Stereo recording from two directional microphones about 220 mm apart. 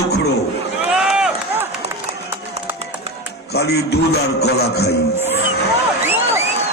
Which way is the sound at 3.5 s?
45° left (ahead or behind).